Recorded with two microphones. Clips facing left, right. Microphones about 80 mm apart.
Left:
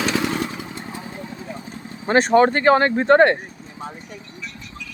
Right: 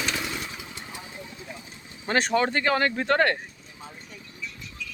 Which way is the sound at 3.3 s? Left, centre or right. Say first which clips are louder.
Left 7 dB; left.